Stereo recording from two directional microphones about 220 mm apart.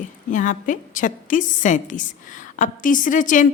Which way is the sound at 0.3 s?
35° left (ahead or behind).